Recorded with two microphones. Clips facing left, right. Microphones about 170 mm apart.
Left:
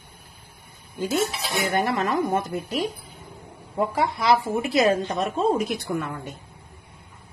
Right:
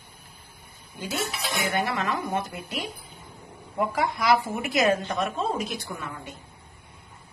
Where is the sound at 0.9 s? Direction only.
45° left (ahead or behind).